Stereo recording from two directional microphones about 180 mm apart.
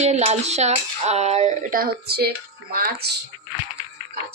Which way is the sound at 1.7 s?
60° right (ahead or behind).